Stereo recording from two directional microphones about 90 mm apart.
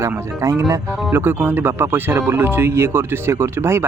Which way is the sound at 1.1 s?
25° right (ahead or behind).